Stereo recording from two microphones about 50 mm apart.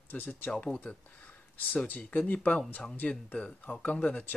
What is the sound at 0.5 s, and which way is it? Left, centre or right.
Speech, centre.